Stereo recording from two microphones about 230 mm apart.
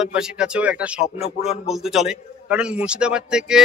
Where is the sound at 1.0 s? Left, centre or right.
Left.